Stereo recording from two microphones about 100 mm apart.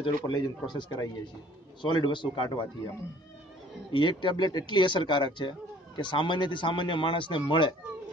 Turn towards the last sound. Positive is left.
turn(degrees=55)  # may be behind; listen again after turning